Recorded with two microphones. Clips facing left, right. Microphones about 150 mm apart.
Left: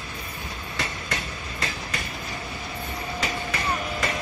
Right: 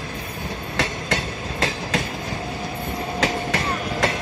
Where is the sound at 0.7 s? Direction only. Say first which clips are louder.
Right 7 dB; 90° right.